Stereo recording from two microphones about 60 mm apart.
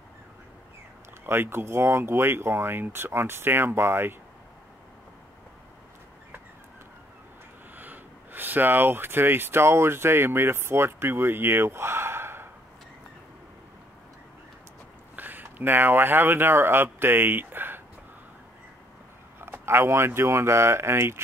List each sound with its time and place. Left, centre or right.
1.2 s speech: right
7.7 s speech: right
15.1 s speech: right
19.4 s a sound: right
20.2 s speech: right